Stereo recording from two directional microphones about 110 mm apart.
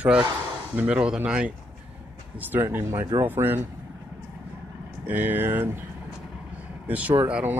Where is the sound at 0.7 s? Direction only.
10° right (ahead or behind).